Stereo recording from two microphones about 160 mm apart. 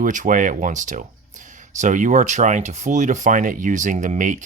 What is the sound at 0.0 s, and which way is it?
Speech, 55° right (ahead or behind).